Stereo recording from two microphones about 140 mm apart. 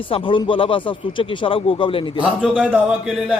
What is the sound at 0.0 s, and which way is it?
Speech, 40° left (ahead or behind).